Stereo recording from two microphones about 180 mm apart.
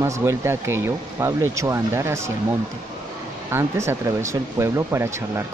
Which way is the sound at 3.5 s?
15° right (ahead or behind).